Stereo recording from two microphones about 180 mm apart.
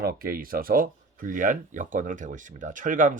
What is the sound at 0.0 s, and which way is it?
Speech, 55° right (ahead or behind).